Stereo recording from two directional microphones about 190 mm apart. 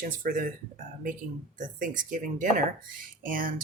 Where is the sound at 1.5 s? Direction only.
45° right (ahead or behind).